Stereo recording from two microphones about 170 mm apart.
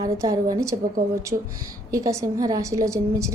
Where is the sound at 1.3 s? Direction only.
30° right (ahead or behind).